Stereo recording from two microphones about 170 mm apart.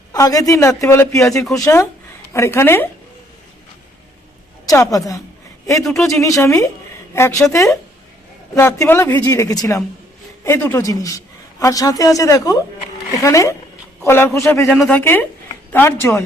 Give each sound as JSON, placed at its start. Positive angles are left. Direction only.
{"t": 0.1, "sound": "a man's voice", "side_deg": 20}
{"t": 2.3, "sound": "a woman's voice", "side_deg": 15}
{"t": 4.6, "sound": "a man's voice", "side_deg": 20}
{"t": 5.8, "sound": "speech", "side_deg": 0}
{"t": 6.1, "sound": "a man's voice", "side_deg": 20}